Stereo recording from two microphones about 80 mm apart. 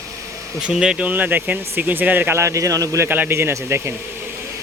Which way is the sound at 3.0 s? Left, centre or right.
Right.